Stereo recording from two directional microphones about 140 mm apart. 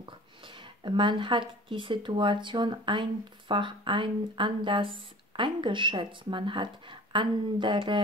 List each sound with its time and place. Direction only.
0.8 s speech: 35° right (ahead or behind)